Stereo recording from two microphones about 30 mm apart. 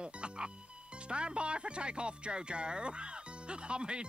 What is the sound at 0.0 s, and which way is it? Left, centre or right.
Music, right.